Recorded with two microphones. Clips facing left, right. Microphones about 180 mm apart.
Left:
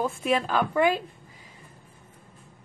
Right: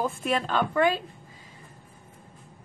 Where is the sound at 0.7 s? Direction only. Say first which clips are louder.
Left 1 dB; 15° left (ahead or behind).